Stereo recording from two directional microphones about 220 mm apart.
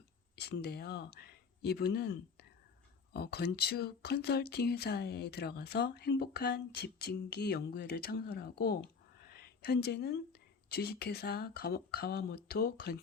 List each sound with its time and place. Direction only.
0.3 s speech: 45° left (ahead or behind)
9.2 s a sound: 45° left (ahead or behind)
10.7 s speech: 45° left (ahead or behind)